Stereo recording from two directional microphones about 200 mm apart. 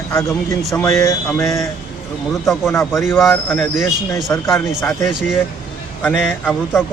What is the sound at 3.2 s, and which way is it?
Speech, 5° left (ahead or behind).